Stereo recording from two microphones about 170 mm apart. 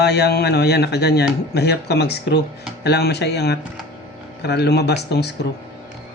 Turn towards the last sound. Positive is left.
turn(degrees=75)  # may be behind; listen again after turning